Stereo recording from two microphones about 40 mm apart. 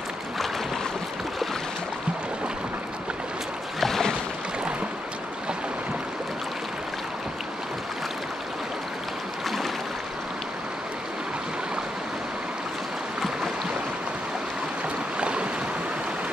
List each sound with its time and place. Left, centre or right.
3.8 s boat: centre
15.1 s stream: right